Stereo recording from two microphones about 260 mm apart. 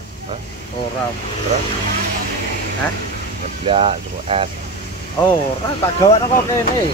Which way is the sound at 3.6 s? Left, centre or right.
Right.